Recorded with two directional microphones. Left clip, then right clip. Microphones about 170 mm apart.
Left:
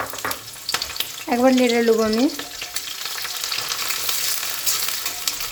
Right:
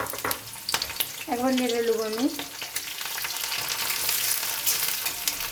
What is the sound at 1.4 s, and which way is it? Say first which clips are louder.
Speech: left 9 dB; 50° left (ahead or behind).